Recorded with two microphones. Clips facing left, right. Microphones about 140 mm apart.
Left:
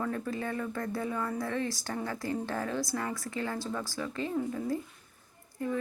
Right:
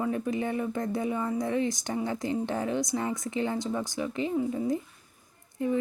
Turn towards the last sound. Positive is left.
turn(degrees=-20)  # may be behind; listen again after turning